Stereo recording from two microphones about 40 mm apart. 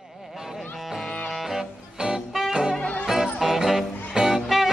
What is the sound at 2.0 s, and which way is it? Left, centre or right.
Music, right.